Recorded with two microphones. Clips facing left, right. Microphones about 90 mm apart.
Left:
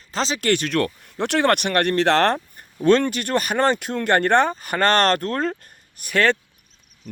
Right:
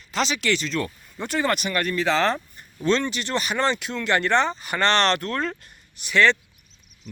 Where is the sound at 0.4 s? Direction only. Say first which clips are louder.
Left 4 dB; 55° left (ahead or behind).